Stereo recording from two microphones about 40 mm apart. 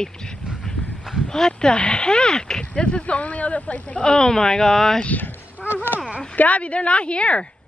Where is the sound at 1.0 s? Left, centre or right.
Centre.